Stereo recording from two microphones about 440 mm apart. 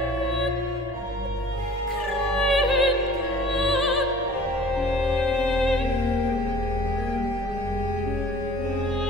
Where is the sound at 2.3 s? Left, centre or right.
Centre.